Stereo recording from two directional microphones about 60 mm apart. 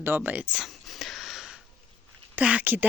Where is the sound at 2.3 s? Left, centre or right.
Right.